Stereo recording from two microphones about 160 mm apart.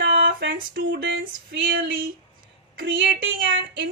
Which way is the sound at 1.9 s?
60° right (ahead or behind).